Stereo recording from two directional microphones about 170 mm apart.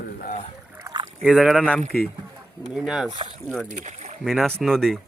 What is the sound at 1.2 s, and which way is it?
Speech, centre (ahead or behind).